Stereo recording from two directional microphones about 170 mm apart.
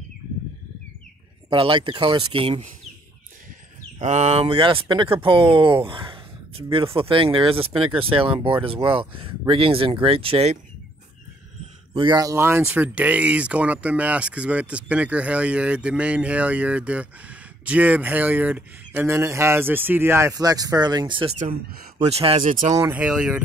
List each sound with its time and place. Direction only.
1.5 s speech: 30° right (ahead or behind)
4.0 s speech: 40° right (ahead or behind)
11.9 s speech: 25° right (ahead or behind)
22.4 s speech: 50° right (ahead or behind)
22.8 s speech: 10° right (ahead or behind)